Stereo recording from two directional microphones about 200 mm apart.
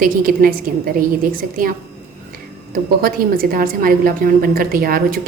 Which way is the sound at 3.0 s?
45° right (ahead or behind).